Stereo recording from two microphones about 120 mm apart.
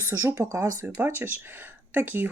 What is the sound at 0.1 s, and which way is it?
Speech, 25° right (ahead or behind).